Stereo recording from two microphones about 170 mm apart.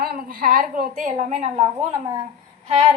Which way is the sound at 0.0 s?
60° right (ahead or behind).